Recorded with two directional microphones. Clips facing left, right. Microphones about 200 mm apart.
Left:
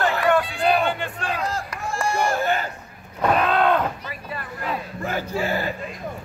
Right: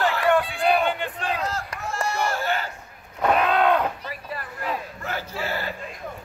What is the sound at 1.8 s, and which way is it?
Run, 10° left (ahead or behind).